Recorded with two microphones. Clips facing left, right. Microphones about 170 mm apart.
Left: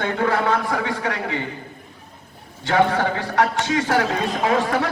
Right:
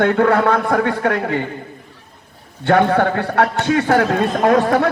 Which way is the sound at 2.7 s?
55° right (ahead or behind).